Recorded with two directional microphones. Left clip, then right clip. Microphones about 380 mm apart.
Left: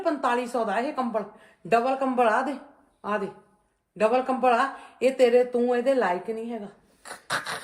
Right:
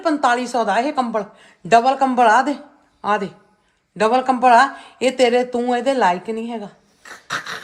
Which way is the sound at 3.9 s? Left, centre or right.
Right.